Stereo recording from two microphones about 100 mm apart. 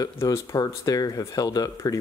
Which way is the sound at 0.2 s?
25° left (ahead or behind).